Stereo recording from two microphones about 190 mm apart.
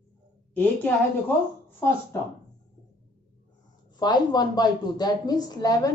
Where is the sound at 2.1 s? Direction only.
15° left (ahead or behind).